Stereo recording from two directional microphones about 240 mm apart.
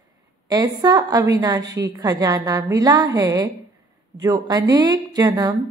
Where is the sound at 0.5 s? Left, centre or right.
Centre.